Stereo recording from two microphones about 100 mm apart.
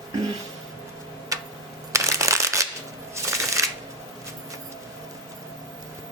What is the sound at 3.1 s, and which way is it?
Shuffling cards, 30° right (ahead or behind).